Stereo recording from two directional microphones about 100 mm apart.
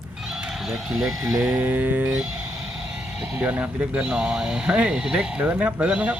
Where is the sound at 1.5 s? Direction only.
20° right (ahead or behind).